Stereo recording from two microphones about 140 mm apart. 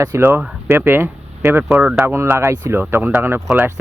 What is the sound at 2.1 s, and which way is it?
Speech, 20° right (ahead or behind).